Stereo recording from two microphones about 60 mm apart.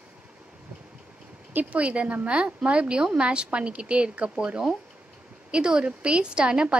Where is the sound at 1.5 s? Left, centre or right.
Right.